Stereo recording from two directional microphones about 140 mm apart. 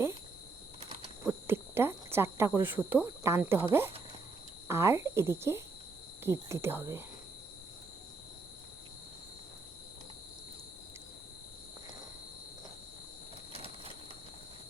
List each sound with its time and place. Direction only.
1.2 s hoot: 20° right (ahead or behind)
2.6 s speech: 15° right (ahead or behind)
13.5 s train: 45° right (ahead or behind)